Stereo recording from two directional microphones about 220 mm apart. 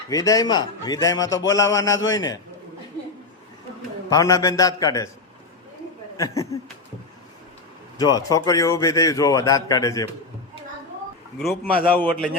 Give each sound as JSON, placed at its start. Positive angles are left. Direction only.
{"t": 0.1, "sound": "a man's voice", "side_deg": 15}
{"t": 4.1, "sound": "a man's voice", "side_deg": 15}
{"t": 6.1, "sound": "a man's voice", "side_deg": 15}
{"t": 7.9, "sound": "a man's voice", "side_deg": 15}
{"t": 11.3, "sound": "a man's voice", "side_deg": 5}